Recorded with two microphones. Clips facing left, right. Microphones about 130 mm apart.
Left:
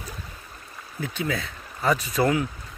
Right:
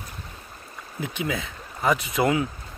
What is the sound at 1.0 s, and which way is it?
Speech, 20° right (ahead or behind).